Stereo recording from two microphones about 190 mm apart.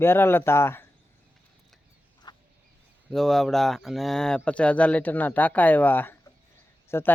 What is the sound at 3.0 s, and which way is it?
Speech, centre (ahead or behind).